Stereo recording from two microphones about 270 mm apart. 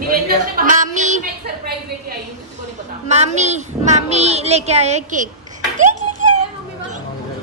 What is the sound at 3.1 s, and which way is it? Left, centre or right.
A child's voice, right.